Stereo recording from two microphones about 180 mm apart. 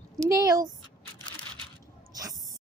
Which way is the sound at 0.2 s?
20° right (ahead or behind).